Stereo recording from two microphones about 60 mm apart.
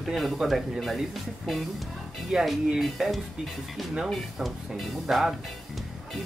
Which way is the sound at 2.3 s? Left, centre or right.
Centre.